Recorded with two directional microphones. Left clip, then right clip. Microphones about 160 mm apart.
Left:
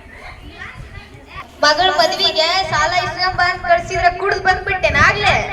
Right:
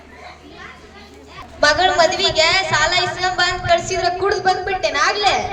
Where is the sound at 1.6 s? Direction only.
20° right (ahead or behind).